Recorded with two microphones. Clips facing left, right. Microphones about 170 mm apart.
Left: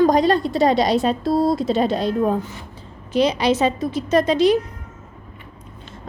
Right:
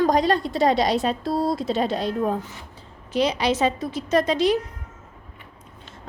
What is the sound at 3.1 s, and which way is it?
A woman's voice, 25° left (ahead or behind).